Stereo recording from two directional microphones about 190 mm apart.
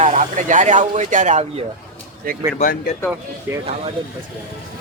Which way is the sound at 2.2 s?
50° right (ahead or behind).